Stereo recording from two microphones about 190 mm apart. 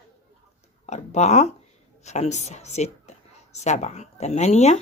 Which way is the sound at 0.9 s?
35° left (ahead or behind).